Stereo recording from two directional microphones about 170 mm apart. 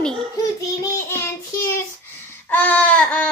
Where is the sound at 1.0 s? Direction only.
15° left (ahead or behind).